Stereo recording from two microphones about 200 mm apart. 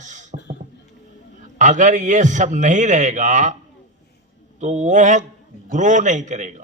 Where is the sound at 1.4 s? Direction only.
40° right (ahead or behind).